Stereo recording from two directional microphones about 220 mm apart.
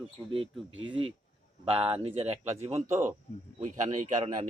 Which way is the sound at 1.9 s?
25° right (ahead or behind).